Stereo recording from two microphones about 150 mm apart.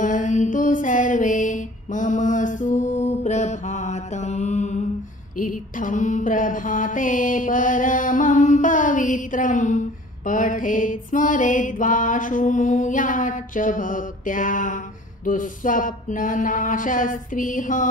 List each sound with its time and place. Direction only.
0.0 s music: 55° left (ahead or behind)
5.4 s mantra: 60° left (ahead or behind)
15.2 s music: 60° left (ahead or behind)